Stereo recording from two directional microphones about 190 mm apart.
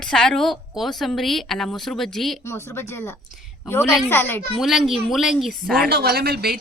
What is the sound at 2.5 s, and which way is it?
A woman's voice, 15° left (ahead or behind).